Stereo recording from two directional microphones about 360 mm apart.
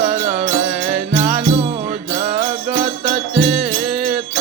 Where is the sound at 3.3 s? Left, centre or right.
Right.